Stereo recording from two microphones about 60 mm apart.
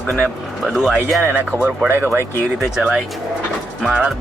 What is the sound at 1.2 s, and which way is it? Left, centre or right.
Speech, right.